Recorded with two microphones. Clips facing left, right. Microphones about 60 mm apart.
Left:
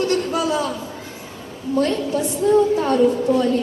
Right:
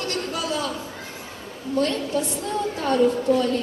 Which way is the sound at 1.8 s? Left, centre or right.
Left.